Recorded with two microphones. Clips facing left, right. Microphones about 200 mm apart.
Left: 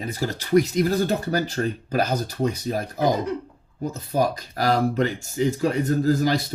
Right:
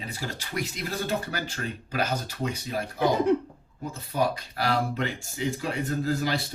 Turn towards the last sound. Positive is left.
turn(degrees=40)  # may be behind; listen again after turning